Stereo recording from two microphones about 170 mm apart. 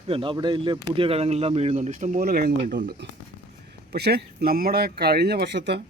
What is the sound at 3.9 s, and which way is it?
Speech, 75° right (ahead or behind).